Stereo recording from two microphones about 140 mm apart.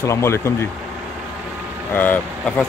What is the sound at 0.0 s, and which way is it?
Speech, 20° left (ahead or behind).